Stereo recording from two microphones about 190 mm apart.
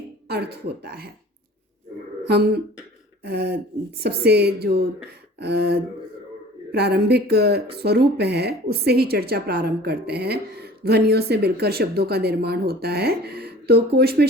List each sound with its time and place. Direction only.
0.3 s a woman's voice: 60° right (ahead or behind)
3.2 s a woman's voice: 60° right (ahead or behind)